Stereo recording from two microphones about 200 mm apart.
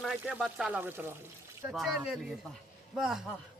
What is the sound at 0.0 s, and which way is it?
Speech, centre (ahead or behind).